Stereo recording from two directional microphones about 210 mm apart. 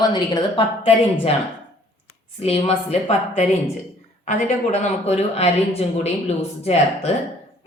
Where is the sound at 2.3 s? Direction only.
25° left (ahead or behind).